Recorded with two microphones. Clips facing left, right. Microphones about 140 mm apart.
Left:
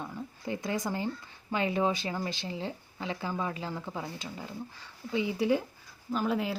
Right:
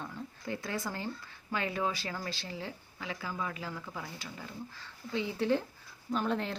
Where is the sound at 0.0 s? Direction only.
15° left (ahead or behind).